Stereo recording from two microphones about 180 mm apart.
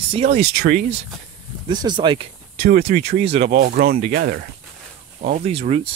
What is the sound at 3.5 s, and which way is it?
Speech, 55° right (ahead or behind).